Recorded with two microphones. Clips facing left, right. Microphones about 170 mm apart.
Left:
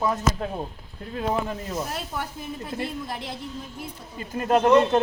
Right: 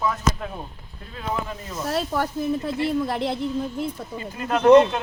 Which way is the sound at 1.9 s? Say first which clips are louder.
Right 8 dB; 65° right (ahead or behind).